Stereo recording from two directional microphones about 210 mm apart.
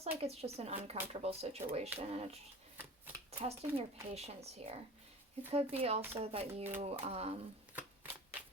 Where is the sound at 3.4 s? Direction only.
30° right (ahead or behind).